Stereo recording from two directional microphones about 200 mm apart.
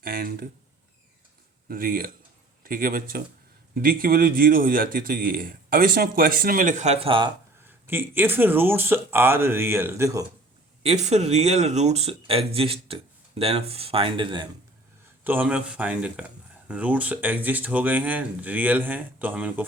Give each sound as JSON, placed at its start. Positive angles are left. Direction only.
{"t": 0.0, "sound": "a man's voice", "side_deg": -45}
{"t": 1.6, "sound": "a man's voice", "side_deg": -45}
{"t": 7.6, "sound": "speech", "side_deg": -10}
{"t": 10.8, "sound": "speech", "side_deg": -35}
{"t": 15.2, "sound": "speech", "side_deg": -10}